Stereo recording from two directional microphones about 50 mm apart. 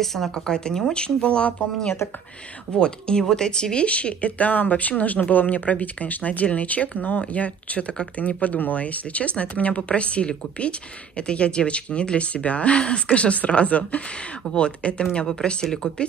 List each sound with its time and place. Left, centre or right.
0.0 s speech: centre